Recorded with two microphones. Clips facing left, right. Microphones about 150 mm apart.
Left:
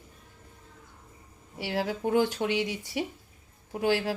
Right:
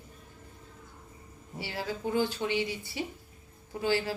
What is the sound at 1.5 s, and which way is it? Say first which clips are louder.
A woman's voice: left 5 dB; 75° left (ahead or behind).